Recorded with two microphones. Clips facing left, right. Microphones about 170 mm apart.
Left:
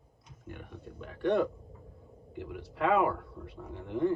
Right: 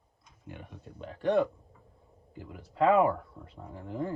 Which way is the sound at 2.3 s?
75° left (ahead or behind).